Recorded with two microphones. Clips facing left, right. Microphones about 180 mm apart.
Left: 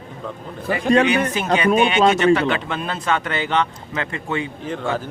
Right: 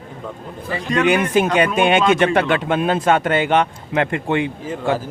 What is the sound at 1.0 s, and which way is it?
Speech, 50° right (ahead or behind).